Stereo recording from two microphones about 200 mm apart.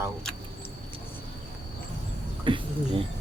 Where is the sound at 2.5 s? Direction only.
25° right (ahead or behind).